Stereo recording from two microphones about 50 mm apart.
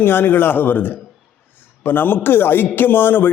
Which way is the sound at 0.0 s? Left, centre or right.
Left.